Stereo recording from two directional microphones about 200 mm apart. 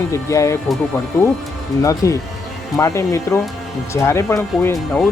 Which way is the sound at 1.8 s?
15° left (ahead or behind).